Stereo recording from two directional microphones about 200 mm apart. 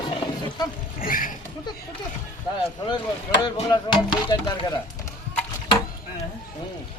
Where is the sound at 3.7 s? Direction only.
20° left (ahead or behind).